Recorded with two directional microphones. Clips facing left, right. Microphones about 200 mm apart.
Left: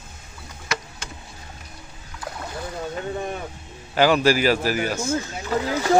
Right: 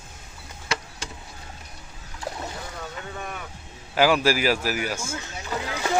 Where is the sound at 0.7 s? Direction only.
30° right (ahead or behind).